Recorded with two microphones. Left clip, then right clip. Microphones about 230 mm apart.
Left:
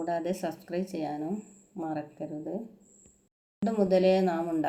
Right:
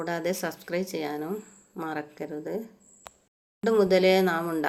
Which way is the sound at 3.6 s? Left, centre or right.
Right.